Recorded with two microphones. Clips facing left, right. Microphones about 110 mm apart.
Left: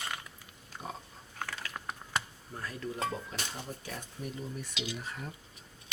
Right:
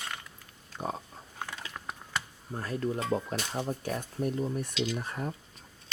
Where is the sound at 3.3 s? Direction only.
50° right (ahead or behind).